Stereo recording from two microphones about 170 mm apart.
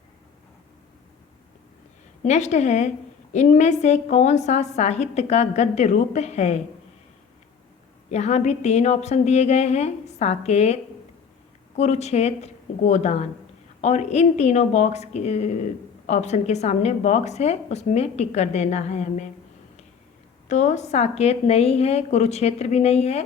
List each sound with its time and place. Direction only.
2.2 s a woman's voice: 40° left (ahead or behind)
8.1 s a woman's voice: 40° left (ahead or behind)
11.8 s a woman's voice: 40° left (ahead or behind)
20.5 s a woman's voice: 45° left (ahead or behind)